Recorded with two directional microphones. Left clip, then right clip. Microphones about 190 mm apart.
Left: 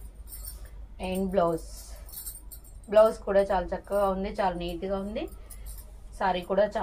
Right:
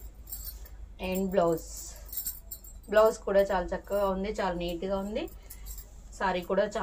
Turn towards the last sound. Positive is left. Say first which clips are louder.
# left 3 dB
turn(degrees=-15)  # may be behind; listen again after turning